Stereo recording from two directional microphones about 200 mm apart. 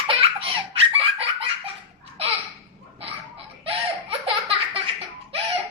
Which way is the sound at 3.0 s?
30° right (ahead or behind).